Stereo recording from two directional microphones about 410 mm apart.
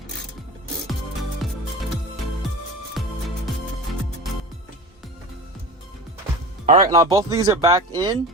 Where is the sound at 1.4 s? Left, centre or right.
Centre.